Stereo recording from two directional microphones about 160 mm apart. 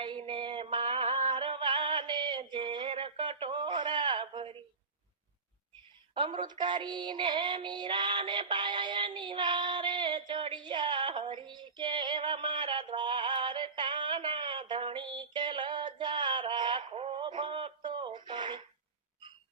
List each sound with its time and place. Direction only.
0.0 s music: 30° right (ahead or behind)
2.5 s a sound: 30° right (ahead or behind)
6.1 s synthetic singing: 30° right (ahead or behind)
18.3 s radio: 30° right (ahead or behind)